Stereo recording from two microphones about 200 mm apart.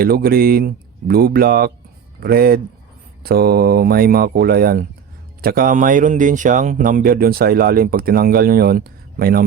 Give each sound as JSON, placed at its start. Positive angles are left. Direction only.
{"t": 0.0, "sound": "speech", "side_deg": -50}